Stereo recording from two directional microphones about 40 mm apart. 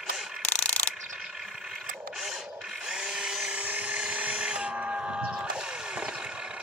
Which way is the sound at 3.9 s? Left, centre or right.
Right.